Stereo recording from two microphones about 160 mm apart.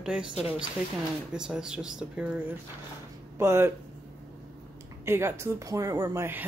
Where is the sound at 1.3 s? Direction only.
5° right (ahead or behind).